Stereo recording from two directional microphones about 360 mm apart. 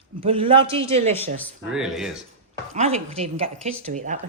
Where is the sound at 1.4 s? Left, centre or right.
Centre.